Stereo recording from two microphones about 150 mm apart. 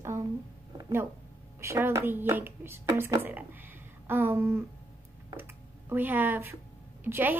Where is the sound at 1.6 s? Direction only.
15° right (ahead or behind).